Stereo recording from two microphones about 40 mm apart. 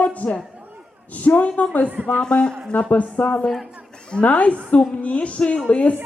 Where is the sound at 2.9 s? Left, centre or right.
Left.